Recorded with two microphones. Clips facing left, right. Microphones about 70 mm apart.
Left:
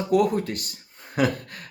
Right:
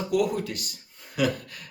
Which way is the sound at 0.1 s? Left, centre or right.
Left.